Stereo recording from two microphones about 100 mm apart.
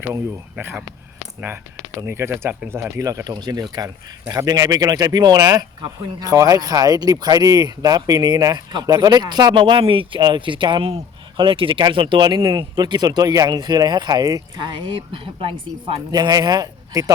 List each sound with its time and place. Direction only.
0.5 s speech: 15° right (ahead or behind)
2.0 s speech: 25° right (ahead or behind)
14.6 s speech: 55° right (ahead or behind)
16.1 s speech: 40° right (ahead or behind)